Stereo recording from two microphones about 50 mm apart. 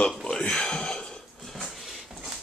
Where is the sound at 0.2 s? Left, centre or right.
Centre.